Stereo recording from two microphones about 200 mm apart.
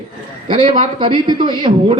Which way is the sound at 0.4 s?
25° right (ahead or behind).